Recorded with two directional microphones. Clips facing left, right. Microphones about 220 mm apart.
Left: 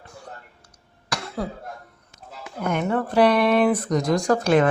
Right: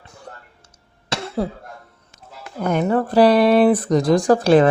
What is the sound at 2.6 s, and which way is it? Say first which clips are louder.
Speech: right 5 dB; 35° right (ahead or behind).